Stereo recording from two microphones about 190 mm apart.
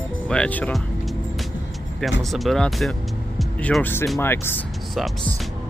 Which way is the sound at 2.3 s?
Centre (ahead or behind).